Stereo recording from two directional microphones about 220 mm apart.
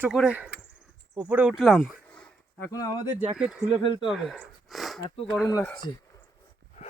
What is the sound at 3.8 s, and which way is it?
Speech, 20° left (ahead or behind).